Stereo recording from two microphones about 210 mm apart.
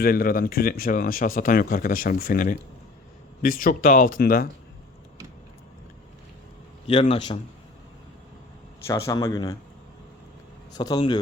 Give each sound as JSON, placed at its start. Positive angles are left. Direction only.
{"t": 0.0, "sound": "speech", "side_deg": 45}
{"t": 6.8, "sound": "a man's voice", "side_deg": 25}
{"t": 8.9, "sound": "a man's voice", "side_deg": 15}
{"t": 10.8, "sound": "a man's voice", "side_deg": 20}